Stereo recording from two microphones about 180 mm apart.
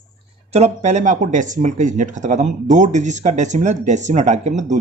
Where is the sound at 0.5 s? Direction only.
40° right (ahead or behind).